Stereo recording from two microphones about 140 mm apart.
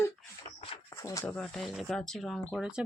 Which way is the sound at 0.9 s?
20° left (ahead or behind).